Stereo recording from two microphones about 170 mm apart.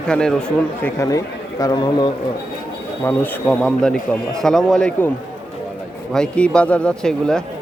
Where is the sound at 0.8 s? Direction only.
20° left (ahead or behind).